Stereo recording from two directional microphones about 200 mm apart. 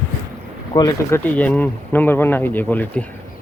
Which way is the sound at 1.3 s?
10° left (ahead or behind).